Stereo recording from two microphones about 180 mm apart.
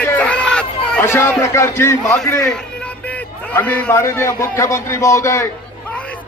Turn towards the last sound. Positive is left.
turn(degrees=15)  # may be behind; listen again after turning